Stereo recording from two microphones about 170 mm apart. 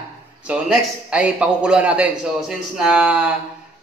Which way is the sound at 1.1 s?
5° right (ahead or behind).